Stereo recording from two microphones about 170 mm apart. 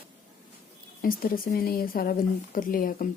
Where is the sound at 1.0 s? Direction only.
55° left (ahead or behind).